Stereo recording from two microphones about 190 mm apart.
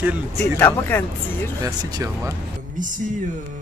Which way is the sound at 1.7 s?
20° right (ahead or behind).